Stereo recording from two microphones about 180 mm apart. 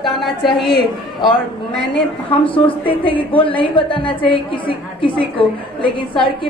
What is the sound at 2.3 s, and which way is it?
A woman's voice, 30° left (ahead or behind).